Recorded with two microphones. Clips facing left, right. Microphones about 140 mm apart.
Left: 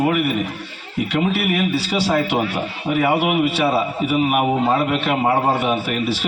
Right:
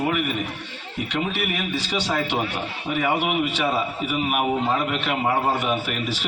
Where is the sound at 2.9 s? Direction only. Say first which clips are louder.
Left 6 dB; 50° left (ahead or behind).